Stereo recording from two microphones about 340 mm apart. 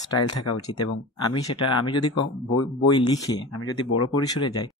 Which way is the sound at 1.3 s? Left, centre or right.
Centre.